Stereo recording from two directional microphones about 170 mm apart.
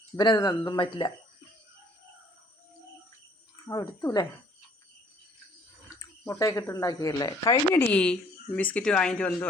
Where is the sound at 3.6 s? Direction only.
20° left (ahead or behind).